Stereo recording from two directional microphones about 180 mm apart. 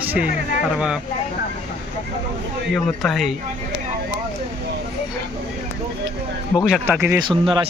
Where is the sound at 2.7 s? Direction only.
Centre (ahead or behind).